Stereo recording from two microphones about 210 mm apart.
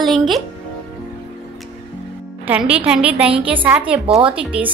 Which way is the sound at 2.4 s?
10° right (ahead or behind).